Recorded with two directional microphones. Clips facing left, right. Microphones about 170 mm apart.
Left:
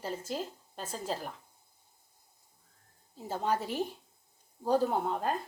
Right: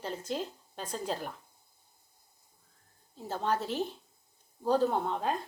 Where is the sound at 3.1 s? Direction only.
10° left (ahead or behind).